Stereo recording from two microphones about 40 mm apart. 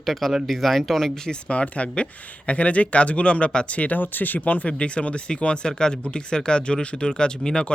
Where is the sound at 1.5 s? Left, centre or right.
Left.